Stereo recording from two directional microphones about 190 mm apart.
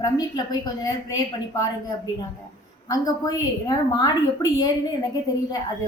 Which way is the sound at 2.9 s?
20° left (ahead or behind).